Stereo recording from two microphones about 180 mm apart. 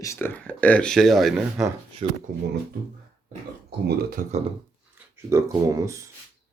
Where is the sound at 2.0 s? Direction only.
35° right (ahead or behind).